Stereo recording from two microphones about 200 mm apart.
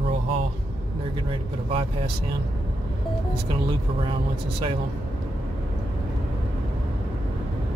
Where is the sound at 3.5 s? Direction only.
25° right (ahead or behind).